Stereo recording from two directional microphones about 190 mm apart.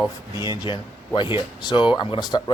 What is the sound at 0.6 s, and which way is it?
A man's voice, 25° left (ahead or behind).